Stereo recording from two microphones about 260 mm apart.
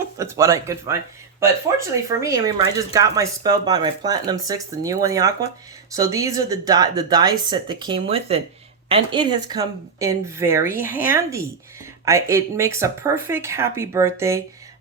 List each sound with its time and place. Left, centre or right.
0.2 s speech: centre